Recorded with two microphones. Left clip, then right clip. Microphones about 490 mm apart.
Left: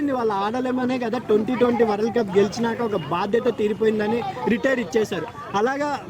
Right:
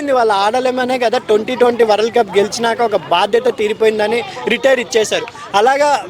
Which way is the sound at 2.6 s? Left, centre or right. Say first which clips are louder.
Right 10 dB; right.